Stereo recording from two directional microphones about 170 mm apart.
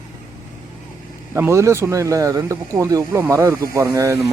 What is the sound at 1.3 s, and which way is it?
Speech, 15° right (ahead or behind).